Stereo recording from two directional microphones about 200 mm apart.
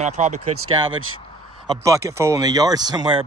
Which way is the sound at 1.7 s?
15° right (ahead or behind).